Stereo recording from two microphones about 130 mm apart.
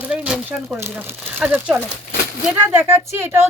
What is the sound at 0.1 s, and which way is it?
Speech, 10° right (ahead or behind).